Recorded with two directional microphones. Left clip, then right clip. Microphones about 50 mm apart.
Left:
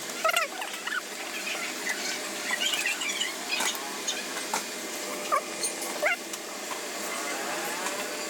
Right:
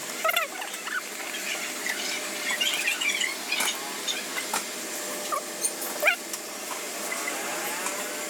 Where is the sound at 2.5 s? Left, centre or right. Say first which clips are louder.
Right 1 dB; left.